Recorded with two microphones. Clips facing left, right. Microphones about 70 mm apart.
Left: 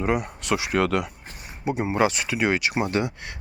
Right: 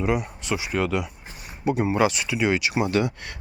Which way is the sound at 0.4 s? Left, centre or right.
Left.